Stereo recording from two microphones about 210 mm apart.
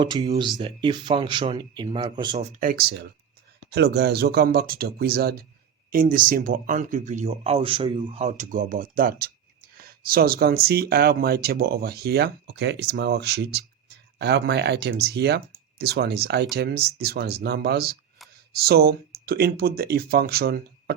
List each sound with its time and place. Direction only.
0.0 s speech: 20° right (ahead or behind)
2.4 s speech: 35° right (ahead or behind)